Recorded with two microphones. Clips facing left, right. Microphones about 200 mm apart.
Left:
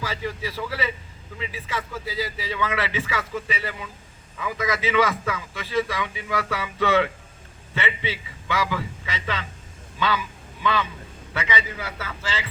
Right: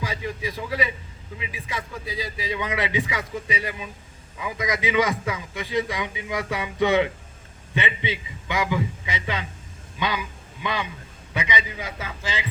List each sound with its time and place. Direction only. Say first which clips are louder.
0.0 s a man's voice: even; 15° right (ahead or behind)